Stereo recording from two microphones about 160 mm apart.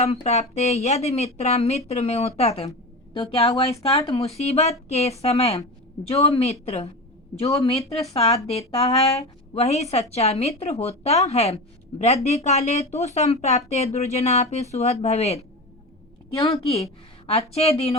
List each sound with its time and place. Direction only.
0.0 s a woman's voice: 45° left (ahead or behind)
16.4 s a woman's voice: 40° left (ahead or behind)